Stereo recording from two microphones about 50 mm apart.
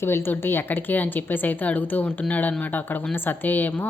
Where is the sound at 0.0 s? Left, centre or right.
Left.